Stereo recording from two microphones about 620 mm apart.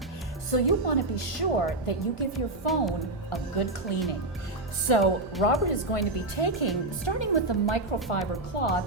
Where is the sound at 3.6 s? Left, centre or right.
Left.